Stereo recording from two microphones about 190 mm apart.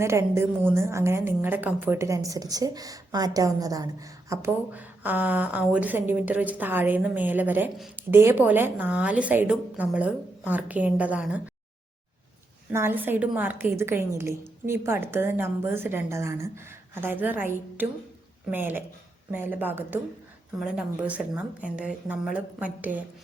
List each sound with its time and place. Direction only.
0.0 s a woman's voice: 15° right (ahead or behind)
12.7 s a woman's voice: 10° right (ahead or behind)